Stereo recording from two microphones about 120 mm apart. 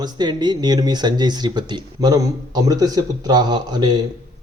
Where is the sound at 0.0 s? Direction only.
35° right (ahead or behind).